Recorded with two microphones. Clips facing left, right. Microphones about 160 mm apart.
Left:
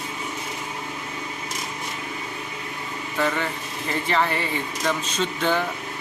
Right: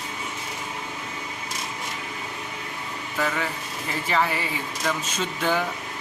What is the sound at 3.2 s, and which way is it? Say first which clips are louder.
Speech: left 2 dB; centre (ahead or behind).